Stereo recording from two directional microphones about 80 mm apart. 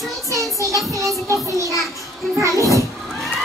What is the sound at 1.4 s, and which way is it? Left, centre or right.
Speech, right.